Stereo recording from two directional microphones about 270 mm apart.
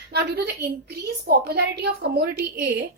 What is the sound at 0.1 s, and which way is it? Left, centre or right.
A woman's voice, right.